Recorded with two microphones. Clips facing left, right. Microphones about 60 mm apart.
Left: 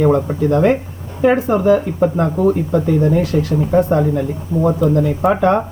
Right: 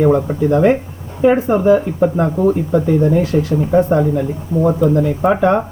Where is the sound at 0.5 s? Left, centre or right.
Centre.